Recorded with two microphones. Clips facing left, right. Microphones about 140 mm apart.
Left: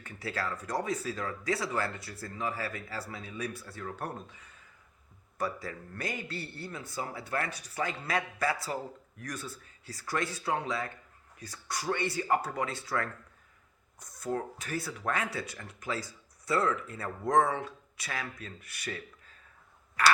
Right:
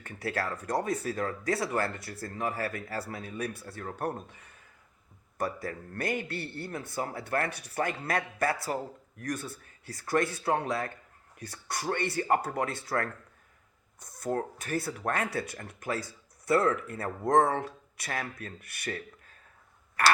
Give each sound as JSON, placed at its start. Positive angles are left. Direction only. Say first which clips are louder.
{"t": 0.0, "sound": "speech", "louder": "right 3 dB", "side_deg": -55}
{"t": 14.2, "sound": "speech", "louder": "right 2 dB", "side_deg": -50}
{"t": 20.0, "sound": "speech", "louder": "right 1 dB", "side_deg": -55}